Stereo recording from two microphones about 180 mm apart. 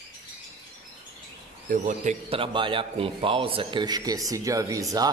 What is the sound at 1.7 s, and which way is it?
Speech, 45° right (ahead or behind).